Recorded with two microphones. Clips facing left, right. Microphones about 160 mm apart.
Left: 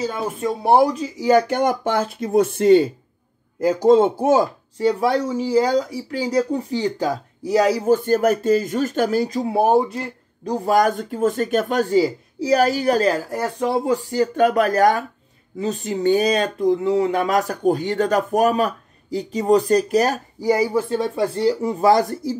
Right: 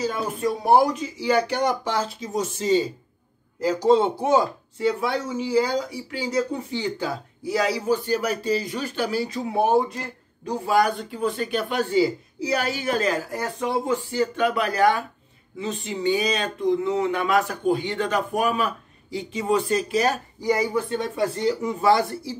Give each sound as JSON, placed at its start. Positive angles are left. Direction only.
{"t": 0.0, "sound": "speech", "side_deg": 30}
{"t": 1.1, "sound": "speech", "side_deg": 45}
{"t": 3.6, "sound": "speech", "side_deg": 50}
{"t": 20.9, "sound": "speech", "side_deg": 30}